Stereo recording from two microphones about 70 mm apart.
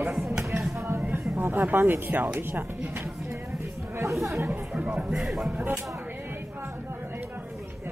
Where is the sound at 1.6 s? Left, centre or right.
Right.